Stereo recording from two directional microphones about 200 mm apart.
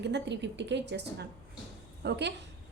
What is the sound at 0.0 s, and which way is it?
A woman's voice, 60° right (ahead or behind).